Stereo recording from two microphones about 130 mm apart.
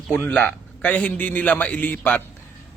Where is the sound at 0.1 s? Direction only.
15° left (ahead or behind).